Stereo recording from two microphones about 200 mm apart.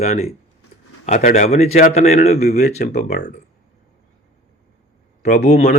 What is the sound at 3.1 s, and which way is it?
Speech, 55° left (ahead or behind).